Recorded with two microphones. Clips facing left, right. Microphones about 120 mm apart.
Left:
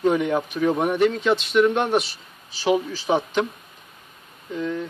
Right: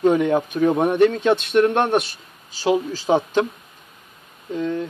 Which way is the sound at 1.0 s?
55° right (ahead or behind).